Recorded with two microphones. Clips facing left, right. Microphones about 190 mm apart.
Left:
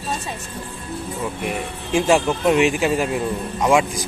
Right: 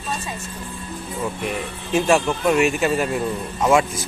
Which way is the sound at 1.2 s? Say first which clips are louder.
Right 1 dB; 10° left (ahead or behind).